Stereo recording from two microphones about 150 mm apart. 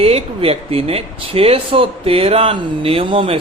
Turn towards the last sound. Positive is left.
turn(degrees=-35)  # may be behind; listen again after turning